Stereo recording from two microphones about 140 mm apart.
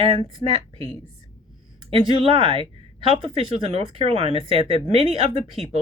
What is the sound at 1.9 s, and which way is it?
Speech, 40° right (ahead or behind).